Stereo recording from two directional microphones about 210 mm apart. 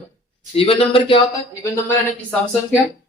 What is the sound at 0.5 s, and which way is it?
Speech, 25° left (ahead or behind).